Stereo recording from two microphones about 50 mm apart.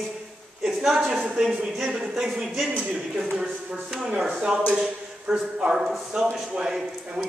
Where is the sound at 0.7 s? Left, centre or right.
Centre.